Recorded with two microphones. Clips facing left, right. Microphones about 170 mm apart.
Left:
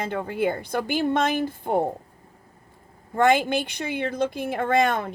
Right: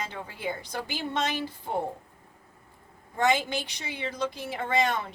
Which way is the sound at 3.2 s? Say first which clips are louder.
Left 6 dB; 55° left (ahead or behind).